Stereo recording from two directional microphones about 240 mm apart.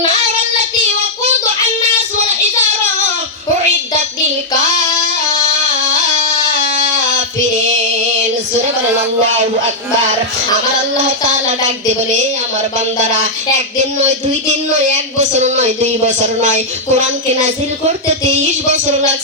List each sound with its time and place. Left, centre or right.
6.1 s music: right
15.2 s speech: right